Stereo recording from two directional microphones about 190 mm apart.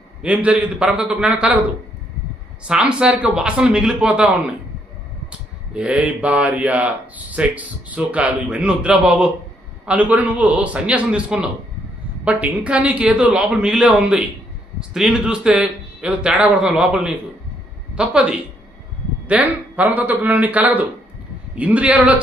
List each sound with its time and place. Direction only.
0.2 s a man's voice: 5° right (ahead or behind)
2.6 s a man's voice: 5° right (ahead or behind)
5.7 s a man's voice: 5° right (ahead or behind)